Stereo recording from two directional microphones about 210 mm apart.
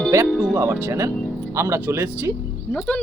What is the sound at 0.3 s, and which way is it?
Speech, centre (ahead or behind).